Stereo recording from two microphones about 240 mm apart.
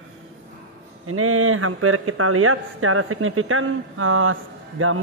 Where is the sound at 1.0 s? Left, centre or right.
Right.